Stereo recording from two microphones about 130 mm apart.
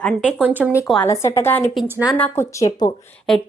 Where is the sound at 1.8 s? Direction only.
15° right (ahead or behind).